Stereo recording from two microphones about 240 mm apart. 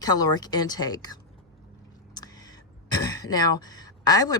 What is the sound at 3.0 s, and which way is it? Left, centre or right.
Speech, centre.